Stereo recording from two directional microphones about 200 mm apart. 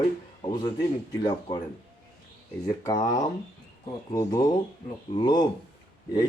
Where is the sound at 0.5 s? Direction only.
20° left (ahead or behind).